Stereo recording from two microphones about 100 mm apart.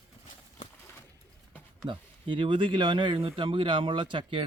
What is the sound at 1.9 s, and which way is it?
Speech, 60° right (ahead or behind).